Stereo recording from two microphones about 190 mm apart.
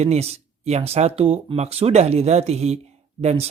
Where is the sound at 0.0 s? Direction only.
35° right (ahead or behind).